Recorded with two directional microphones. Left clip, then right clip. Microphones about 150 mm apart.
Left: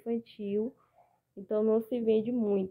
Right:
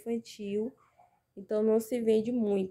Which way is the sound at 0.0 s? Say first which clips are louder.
Left 1 dB; 15° right (ahead or behind).